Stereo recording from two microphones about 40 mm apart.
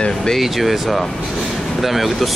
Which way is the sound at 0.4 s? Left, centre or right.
Centre.